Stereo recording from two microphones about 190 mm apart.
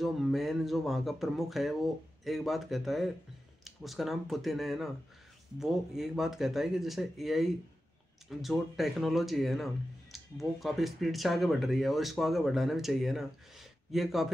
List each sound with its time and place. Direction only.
0.0 s speech: centre (ahead or behind)